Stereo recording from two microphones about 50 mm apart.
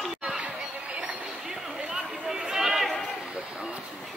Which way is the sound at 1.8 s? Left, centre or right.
Centre.